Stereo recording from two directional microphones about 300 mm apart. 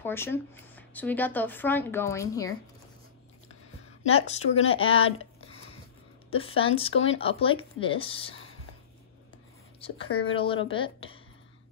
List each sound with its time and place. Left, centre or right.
0.0 s speech: centre
4.1 s speech: centre
6.9 s speech: left
7.2 s speech: centre
9.8 s speech: centre